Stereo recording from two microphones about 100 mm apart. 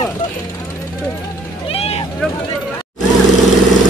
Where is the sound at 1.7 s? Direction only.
75° left (ahead or behind).